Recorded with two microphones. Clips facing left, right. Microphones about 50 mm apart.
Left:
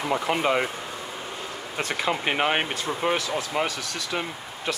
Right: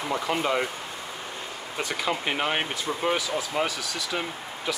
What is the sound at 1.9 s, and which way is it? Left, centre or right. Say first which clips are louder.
Speech: left 3 dB; centre.